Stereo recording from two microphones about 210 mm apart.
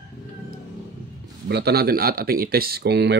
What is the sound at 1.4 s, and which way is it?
Speech, 50° right (ahead or behind).